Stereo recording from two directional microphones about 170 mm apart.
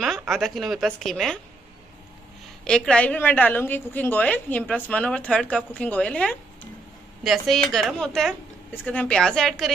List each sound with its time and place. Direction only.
0.0 s a woman's voice: centre (ahead or behind)
2.6 s a woman's voice: 5° left (ahead or behind)